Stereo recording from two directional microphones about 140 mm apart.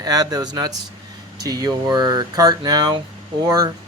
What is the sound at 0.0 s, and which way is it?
Speech, 25° right (ahead or behind).